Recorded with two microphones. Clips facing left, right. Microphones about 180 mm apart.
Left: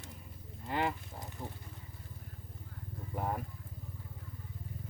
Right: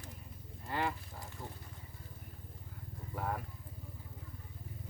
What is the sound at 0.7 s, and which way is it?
Livestock, 20° left (ahead or behind).